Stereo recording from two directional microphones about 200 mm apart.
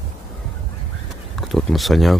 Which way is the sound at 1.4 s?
Centre (ahead or behind).